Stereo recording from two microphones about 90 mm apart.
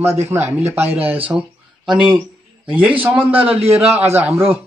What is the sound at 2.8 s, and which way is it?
Speech, 15° right (ahead or behind).